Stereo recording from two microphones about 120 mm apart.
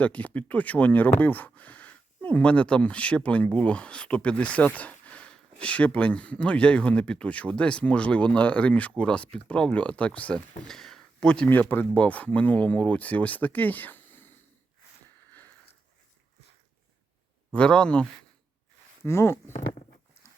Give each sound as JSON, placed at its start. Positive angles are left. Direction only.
{"t": 0.0, "sound": "speech", "side_deg": 10}
{"t": 10.7, "sound": "a sound", "side_deg": 5}
{"t": 11.6, "sound": "speech", "side_deg": 15}
{"t": 15.3, "sound": "sniff", "side_deg": 15}
{"t": 17.5, "sound": "speech", "side_deg": 10}
{"t": 19.0, "sound": "speech", "side_deg": 20}